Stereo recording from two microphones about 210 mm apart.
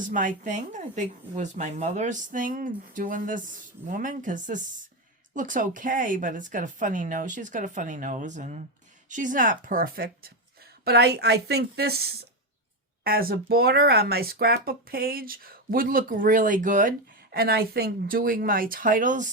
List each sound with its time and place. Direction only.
0.0 s speech: 40° right (ahead or behind)
13.1 s speech: 45° right (ahead or behind)